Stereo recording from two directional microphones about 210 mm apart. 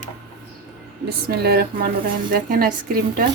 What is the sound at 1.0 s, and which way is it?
Speech, 50° right (ahead or behind).